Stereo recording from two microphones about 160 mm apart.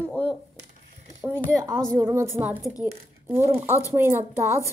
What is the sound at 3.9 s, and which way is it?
Speech, 15° right (ahead or behind).